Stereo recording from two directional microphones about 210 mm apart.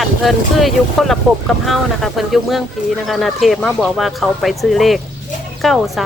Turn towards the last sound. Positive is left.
turn(degrees=0)  # may be behind; listen again after turning